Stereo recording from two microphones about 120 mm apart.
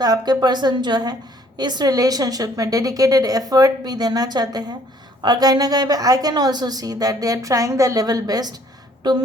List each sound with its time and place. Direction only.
0.0 s a woman's voice: 35° right (ahead or behind)